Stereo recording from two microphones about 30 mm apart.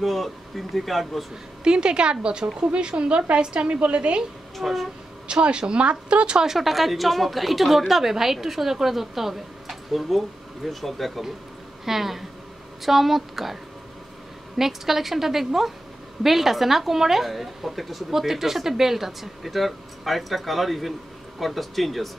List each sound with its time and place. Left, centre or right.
0.0 s speech: centre
1.6 s a woman's voice: right
4.6 s speech: centre
5.3 s speech: right
6.6 s speech: centre
11.8 s speech: centre
14.6 s speech: centre